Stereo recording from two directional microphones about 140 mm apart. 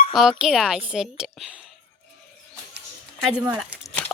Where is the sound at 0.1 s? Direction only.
5° right (ahead or behind).